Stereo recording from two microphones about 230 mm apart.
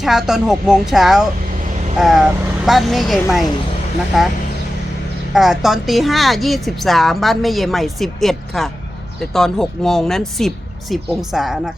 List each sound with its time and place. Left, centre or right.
0.0 s a woman's voice: centre
5.3 s a woman's voice: centre